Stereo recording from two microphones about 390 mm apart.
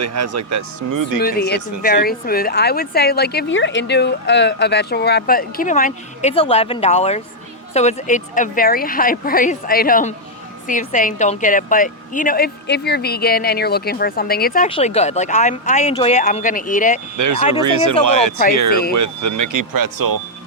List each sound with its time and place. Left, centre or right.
0.0 s speech: right
1.2 s a woman's voice: left
17.2 s speech: right